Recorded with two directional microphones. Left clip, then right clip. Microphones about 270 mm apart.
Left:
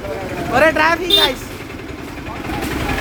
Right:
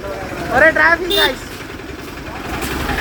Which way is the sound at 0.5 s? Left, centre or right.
Centre.